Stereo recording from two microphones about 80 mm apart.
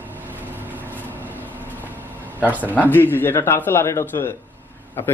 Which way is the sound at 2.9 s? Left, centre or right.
Left.